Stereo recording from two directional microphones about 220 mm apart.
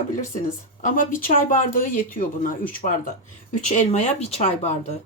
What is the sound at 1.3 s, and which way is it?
A woman's voice, 40° left (ahead or behind).